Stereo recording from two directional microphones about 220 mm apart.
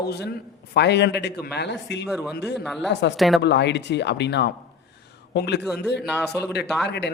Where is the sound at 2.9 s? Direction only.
50° left (ahead or behind).